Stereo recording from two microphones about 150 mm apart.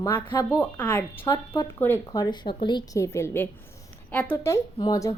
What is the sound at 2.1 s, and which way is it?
A woman's voice, 25° left (ahead or behind).